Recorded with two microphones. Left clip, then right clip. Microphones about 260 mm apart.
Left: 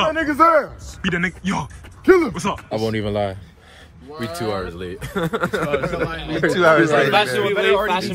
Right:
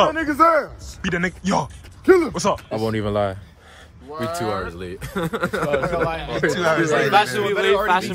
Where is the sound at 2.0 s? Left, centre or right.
Left.